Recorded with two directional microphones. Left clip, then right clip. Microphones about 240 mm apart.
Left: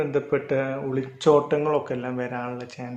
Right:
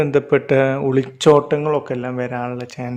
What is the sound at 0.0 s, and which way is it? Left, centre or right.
Speech, right.